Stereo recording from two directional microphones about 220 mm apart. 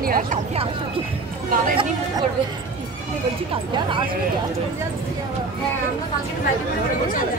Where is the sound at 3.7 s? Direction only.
20° right (ahead or behind).